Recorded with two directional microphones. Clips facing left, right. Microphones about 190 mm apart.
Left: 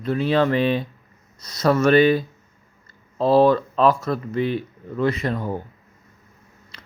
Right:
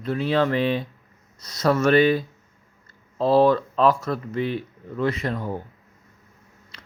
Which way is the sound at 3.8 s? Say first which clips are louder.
Left 1 dB; 25° left (ahead or behind).